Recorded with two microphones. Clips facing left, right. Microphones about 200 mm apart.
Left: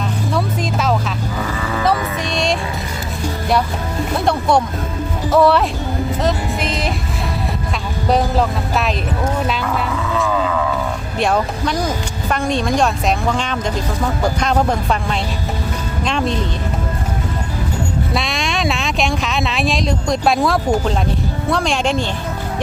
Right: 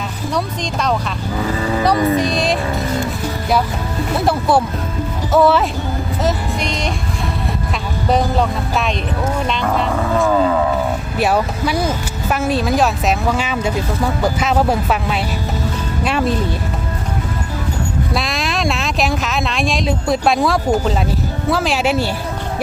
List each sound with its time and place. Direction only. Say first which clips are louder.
0.3 s music: even; 5° left (ahead or behind)
2.1 s music: right 3 dB; centre (ahead or behind)
4.3 s speech: even; 5° right (ahead or behind)
8.1 s speech: even; centre (ahead or behind)
9.9 s vehicle: right 5 dB; 45° right (ahead or behind)
11.2 s speech: even; 5° right (ahead or behind)
18.1 s speech: even; centre (ahead or behind)